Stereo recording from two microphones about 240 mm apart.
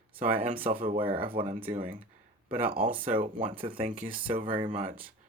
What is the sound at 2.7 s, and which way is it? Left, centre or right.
Speech, right.